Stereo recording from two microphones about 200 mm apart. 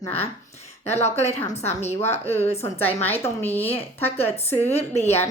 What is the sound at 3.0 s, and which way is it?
Speech, 10° left (ahead or behind).